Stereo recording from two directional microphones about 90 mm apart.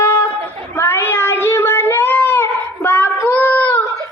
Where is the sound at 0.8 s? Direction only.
30° left (ahead or behind).